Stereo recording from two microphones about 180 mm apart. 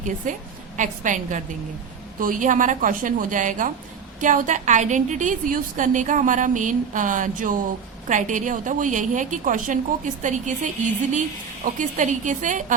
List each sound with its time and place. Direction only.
0.8 s a woman's voice: 45° right (ahead or behind)